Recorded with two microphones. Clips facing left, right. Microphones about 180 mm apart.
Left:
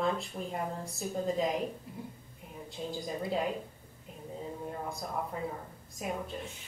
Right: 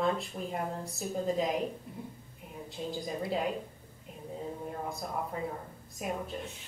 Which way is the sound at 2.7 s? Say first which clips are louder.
Right 1 dB; centre (ahead or behind).